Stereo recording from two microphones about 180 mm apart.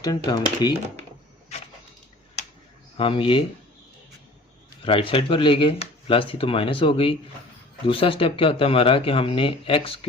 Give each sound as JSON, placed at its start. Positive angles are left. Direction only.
{"t": 0.0, "sound": "speech", "side_deg": 20}
{"t": 3.0, "sound": "speech", "side_deg": 30}
{"t": 4.9, "sound": "speech", "side_deg": 30}